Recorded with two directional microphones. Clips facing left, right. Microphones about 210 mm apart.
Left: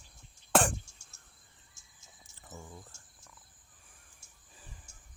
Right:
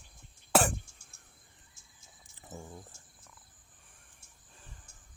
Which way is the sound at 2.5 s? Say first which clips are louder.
Right 2 dB; 25° right (ahead or behind).